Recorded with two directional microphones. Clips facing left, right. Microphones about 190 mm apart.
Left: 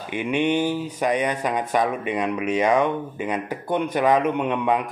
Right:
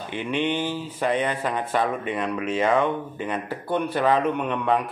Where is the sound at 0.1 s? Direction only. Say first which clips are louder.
Left 4 dB; 15° left (ahead or behind).